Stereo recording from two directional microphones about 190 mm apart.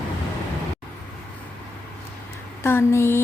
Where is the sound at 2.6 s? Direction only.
15° left (ahead or behind).